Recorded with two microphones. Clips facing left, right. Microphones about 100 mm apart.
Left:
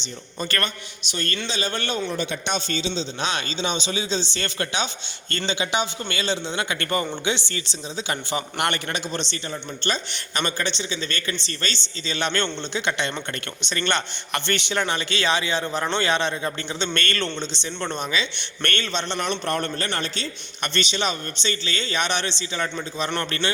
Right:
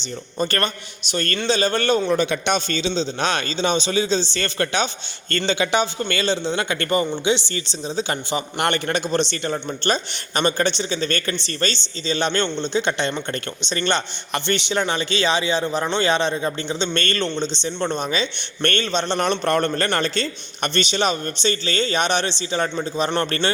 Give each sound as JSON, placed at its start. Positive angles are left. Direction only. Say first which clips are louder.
{"t": 0.3, "sound": "speech", "louder": "right 5 dB", "side_deg": -35}
{"t": 1.1, "sound": "a man's voice", "louder": "right 7 dB", "side_deg": -50}
{"t": 2.1, "sound": "a man's voice", "louder": "right 6 dB", "side_deg": -75}
{"t": 7.0, "sound": "a man's voice", "louder": "right 5 dB", "side_deg": -20}
{"t": 7.5, "sound": "speech", "louder": "right 6 dB", "side_deg": -30}
{"t": 9.3, "sound": "a man's voice", "louder": "right 6 dB", "side_deg": -55}
{"t": 19.2, "sound": "a man's voice", "louder": "right 6 dB", "side_deg": -70}
{"t": 20.6, "sound": "speech", "louder": "right 4 dB", "side_deg": -40}